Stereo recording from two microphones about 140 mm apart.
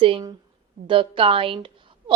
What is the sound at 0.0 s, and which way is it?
A woman's voice, 35° right (ahead or behind).